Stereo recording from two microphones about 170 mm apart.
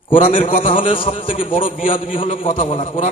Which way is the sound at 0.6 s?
30° left (ahead or behind).